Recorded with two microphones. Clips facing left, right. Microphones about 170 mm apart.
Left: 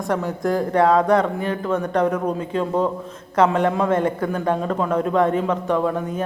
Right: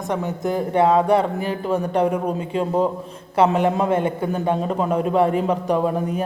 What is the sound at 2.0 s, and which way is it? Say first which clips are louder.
Speech: even; 10° right (ahead or behind).